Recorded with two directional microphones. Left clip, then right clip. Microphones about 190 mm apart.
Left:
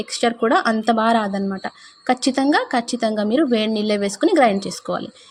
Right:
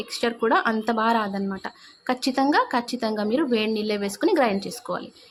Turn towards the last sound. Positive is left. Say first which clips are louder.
# left 5 dB
turn(degrees=15)  # may be behind; listen again after turning